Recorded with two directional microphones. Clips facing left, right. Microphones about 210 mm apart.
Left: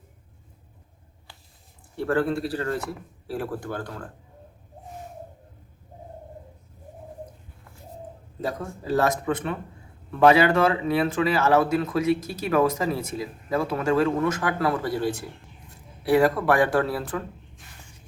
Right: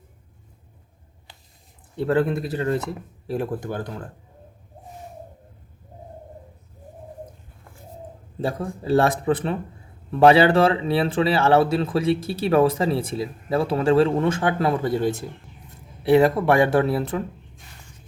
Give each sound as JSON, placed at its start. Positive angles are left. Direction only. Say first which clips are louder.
{"t": 2.0, "sound": "speech", "louder": "right 3 dB", "side_deg": -20}
{"t": 8.4, "sound": "speech", "louder": "right 4 dB", "side_deg": -30}